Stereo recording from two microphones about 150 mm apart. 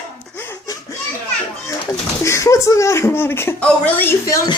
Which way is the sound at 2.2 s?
20° left (ahead or behind).